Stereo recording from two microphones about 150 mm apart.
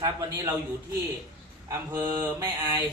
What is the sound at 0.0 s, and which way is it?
Speech, 20° right (ahead or behind).